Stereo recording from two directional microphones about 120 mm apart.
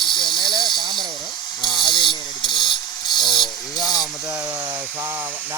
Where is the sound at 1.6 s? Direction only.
Centre (ahead or behind).